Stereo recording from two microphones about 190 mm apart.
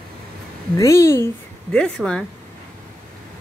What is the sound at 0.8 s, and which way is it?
A woman's voice, 15° left (ahead or behind).